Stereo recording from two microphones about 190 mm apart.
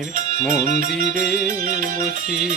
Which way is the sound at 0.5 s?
40° right (ahead or behind).